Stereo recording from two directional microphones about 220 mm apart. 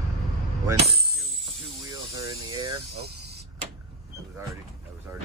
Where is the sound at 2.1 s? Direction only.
20° right (ahead or behind).